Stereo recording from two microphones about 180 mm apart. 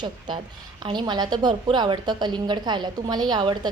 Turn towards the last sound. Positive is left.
turn(degrees=-25)  # may be behind; listen again after turning